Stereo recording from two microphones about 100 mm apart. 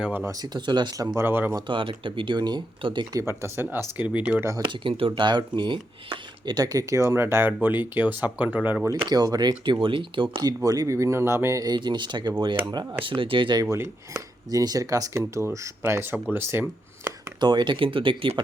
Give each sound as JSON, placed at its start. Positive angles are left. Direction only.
{"t": 0.3, "sound": "speech", "side_deg": -40}
{"t": 1.1, "sound": "speech", "side_deg": -25}
{"t": 1.6, "sound": "speech", "side_deg": -60}
{"t": 3.2, "sound": "speech", "side_deg": -25}
{"t": 4.6, "sound": "speech", "side_deg": -55}
{"t": 8.9, "sound": "speech", "side_deg": -40}
{"t": 10.6, "sound": "speech", "side_deg": -35}
{"t": 12.7, "sound": "speech", "side_deg": -60}
{"t": 13.6, "sound": "speech", "side_deg": -30}
{"t": 17.4, "sound": "speech", "side_deg": -50}